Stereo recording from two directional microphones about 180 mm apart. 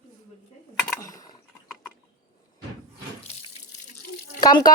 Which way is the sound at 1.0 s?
20° left (ahead or behind).